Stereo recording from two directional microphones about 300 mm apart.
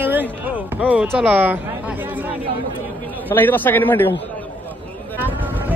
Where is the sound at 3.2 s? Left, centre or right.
Centre.